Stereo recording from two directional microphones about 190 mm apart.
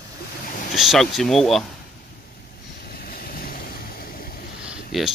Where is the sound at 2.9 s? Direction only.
50° left (ahead or behind).